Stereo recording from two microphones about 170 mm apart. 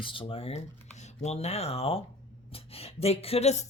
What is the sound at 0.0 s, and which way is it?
Speech, 30° left (ahead or behind).